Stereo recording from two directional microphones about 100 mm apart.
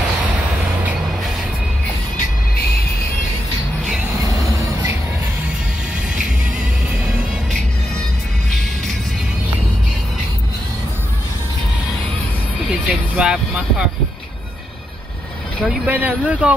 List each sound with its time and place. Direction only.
12.8 s vehicle: 5° right (ahead or behind)
15.6 s speech: 5° right (ahead or behind)
15.9 s speech: 20° right (ahead or behind)